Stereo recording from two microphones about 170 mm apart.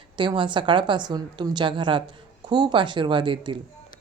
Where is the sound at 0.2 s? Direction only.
30° right (ahead or behind).